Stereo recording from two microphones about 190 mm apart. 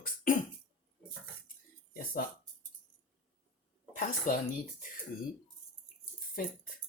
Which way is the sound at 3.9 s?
45° left (ahead or behind).